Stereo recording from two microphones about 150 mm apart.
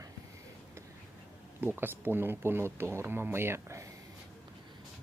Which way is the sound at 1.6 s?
15° right (ahead or behind).